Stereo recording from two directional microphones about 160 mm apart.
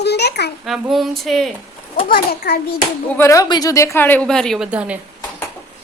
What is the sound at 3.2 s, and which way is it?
A woman's voice, 20° left (ahead or behind).